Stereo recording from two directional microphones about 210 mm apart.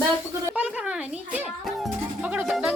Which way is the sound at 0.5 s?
5° right (ahead or behind).